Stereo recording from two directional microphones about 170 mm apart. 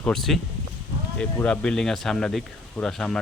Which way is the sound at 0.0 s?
Centre (ahead or behind).